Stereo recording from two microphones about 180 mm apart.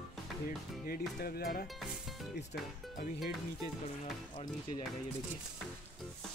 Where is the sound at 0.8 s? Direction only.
55° left (ahead or behind).